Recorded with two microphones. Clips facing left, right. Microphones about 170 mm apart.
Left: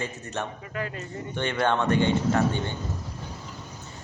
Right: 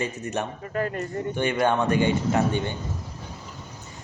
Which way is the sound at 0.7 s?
45° right (ahead or behind).